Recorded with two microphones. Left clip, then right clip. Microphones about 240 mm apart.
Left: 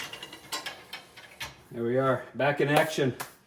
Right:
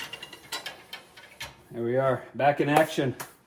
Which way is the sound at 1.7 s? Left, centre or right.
Centre.